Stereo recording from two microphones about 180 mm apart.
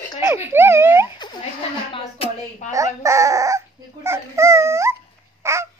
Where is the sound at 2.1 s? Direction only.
30° left (ahead or behind).